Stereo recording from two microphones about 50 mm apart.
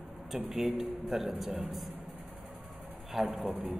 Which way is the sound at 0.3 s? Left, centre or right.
Centre.